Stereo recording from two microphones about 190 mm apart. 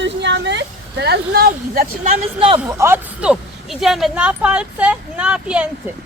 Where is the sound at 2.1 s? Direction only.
30° right (ahead or behind).